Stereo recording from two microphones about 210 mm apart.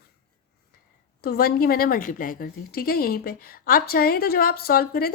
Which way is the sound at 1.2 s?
45° left (ahead or behind).